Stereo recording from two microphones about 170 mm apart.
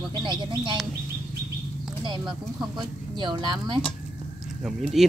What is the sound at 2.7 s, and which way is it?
Speech, 25° right (ahead or behind).